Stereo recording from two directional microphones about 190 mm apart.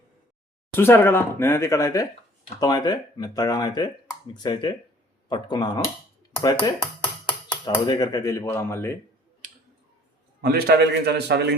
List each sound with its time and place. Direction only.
0.8 s speech: 10° left (ahead or behind)
10.4 s a man's voice: 55° right (ahead or behind)